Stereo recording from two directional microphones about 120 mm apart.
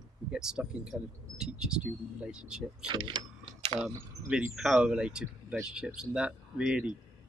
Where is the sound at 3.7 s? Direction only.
5° right (ahead or behind).